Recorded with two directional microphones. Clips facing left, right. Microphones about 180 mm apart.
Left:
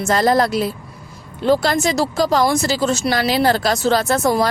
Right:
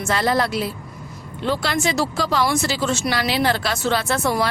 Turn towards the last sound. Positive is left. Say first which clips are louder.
# left 4 dB
turn(degrees=40)  # may be behind; listen again after turning